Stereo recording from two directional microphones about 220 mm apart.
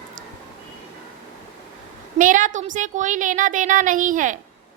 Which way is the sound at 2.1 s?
35° right (ahead or behind).